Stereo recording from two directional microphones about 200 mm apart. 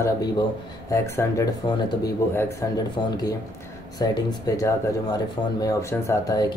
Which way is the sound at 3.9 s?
20° left (ahead or behind).